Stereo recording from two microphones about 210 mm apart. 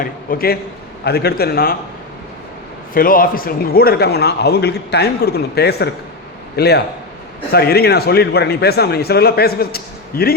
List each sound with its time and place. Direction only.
0.0 s a man's voice: 45° left (ahead or behind)
2.9 s a man's voice: 45° left (ahead or behind)